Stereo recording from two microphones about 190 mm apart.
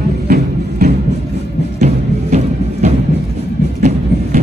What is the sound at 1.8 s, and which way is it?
Music, 35° right (ahead or behind).